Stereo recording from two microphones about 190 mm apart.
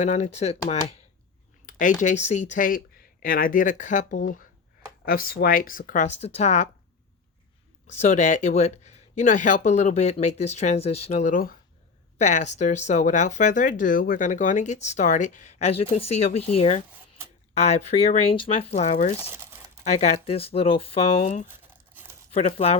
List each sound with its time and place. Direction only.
0.0 s speech: 35° left (ahead or behind)
7.9 s speech: 40° left (ahead or behind)
19.2 s crumpling: 15° right (ahead or behind)
19.8 s speech: 35° left (ahead or behind)
21.4 s crumpling: 10° right (ahead or behind)
22.3 s speech: 30° left (ahead or behind)